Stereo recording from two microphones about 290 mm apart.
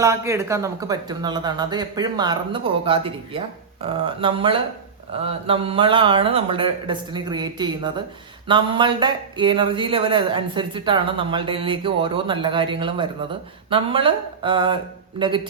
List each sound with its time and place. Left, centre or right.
0.0 s speech: centre